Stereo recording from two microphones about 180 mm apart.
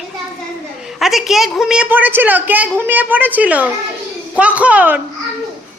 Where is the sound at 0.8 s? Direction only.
Centre (ahead or behind).